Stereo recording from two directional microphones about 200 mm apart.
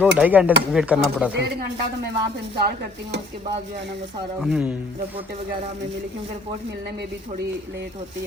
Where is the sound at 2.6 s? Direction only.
55° right (ahead or behind).